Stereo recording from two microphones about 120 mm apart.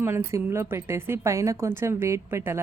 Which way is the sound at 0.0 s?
20° right (ahead or behind).